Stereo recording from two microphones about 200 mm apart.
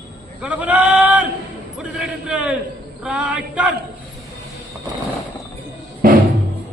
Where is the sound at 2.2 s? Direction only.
5° right (ahead or behind).